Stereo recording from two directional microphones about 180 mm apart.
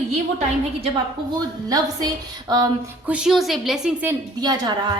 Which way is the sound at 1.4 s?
20° right (ahead or behind).